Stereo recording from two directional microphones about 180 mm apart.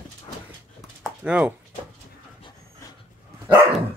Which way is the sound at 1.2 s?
5° right (ahead or behind).